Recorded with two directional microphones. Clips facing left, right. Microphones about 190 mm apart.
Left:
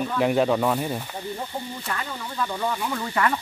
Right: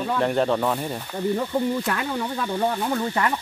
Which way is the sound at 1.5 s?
75° right (ahead or behind).